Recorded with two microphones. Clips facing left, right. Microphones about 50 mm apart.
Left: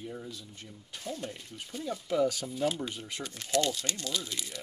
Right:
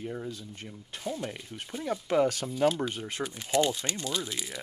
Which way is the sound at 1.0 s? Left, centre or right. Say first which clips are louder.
Right 4 dB; right.